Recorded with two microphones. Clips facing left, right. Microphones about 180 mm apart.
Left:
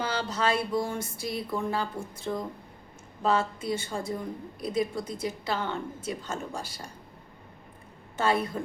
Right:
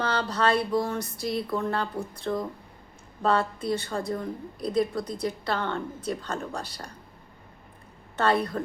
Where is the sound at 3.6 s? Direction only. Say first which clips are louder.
Right 3 dB; 60° right (ahead or behind).